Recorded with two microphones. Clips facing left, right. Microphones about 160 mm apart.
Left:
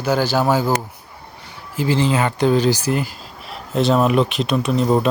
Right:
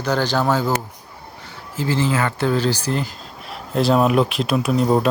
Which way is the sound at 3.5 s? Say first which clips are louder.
Even; centre (ahead or behind).